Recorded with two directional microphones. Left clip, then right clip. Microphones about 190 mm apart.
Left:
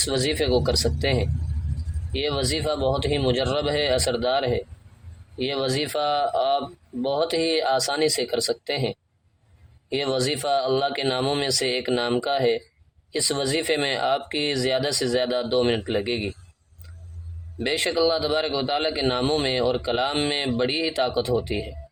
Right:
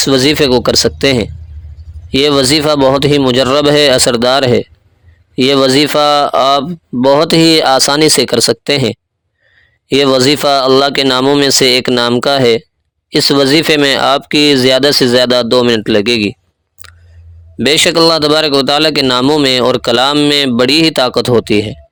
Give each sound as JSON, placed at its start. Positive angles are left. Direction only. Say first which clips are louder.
{"t": 0.0, "sound": "speech", "louder": "right 14 dB", "side_deg": -45}
{"t": 17.6, "sound": "speech", "louder": "right 14 dB", "side_deg": -45}